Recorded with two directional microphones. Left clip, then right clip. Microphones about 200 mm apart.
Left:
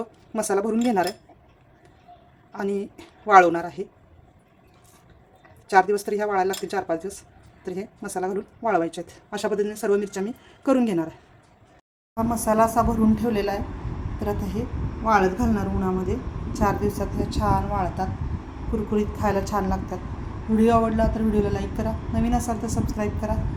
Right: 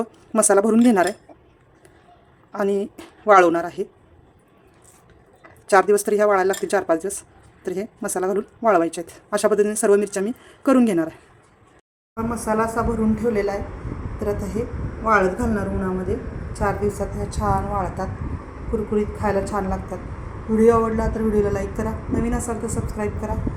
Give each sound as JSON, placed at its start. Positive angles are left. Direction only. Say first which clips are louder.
{"t": 0.0, "sound": "speech", "louder": "right 8 dB", "side_deg": -30}
{"t": 2.5, "sound": "speech", "louder": "right 6 dB", "side_deg": -25}
{"t": 5.6, "sound": "speech", "louder": "right 3 dB", "side_deg": -30}
{"t": 12.1, "sound": "speech", "louder": "left 1 dB", "side_deg": 10}
{"t": 14.2, "sound": "a woman's voice", "louder": "right 4 dB", "side_deg": -5}